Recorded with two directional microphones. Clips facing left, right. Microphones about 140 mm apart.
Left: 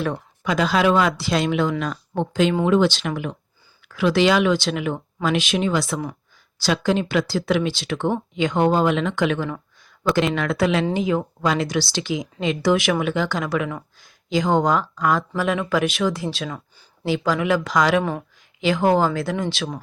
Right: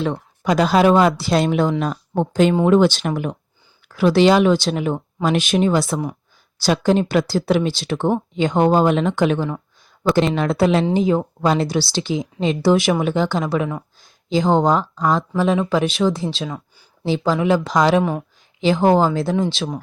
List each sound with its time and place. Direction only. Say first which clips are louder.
0.4 s speech: right 4 dB; 40° right (ahead or behind)
3.8 s speech: right 4 dB; 35° right (ahead or behind)
5.8 s speech: right 3 dB; 25° right (ahead or behind)
6.6 s speech: right 4 dB; 45° right (ahead or behind); by 13.7 s 30° right (ahead or behind)
13.7 s speech: right 3 dB; 15° right (ahead or behind)
14.3 s speech: right 3 dB; 30° right (ahead or behind)